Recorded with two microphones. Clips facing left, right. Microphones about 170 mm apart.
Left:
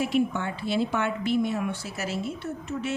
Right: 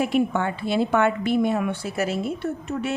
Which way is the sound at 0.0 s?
55° right (ahead or behind).